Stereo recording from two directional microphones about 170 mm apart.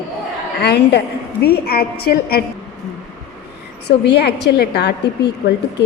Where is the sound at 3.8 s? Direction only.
75° left (ahead or behind).